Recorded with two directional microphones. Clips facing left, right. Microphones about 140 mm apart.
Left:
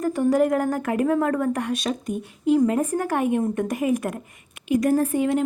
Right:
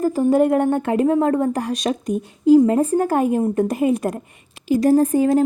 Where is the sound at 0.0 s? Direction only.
30° right (ahead or behind).